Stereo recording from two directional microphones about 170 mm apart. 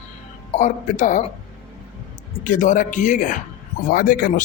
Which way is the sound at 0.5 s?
45° left (ahead or behind).